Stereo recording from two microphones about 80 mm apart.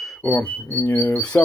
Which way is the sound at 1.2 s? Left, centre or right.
Centre.